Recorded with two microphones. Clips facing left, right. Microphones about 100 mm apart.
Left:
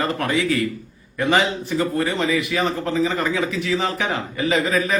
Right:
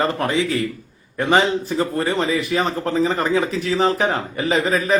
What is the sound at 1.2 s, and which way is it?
A man's voice, 35° right (ahead or behind).